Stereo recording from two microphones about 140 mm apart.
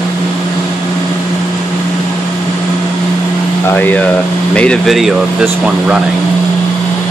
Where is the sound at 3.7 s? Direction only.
15° left (ahead or behind); by 6.0 s 5° right (ahead or behind).